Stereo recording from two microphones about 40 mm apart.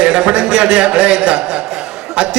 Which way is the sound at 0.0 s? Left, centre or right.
Right.